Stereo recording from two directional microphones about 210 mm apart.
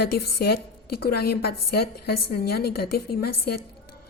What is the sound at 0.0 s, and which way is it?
A woman's voice, 50° left (ahead or behind).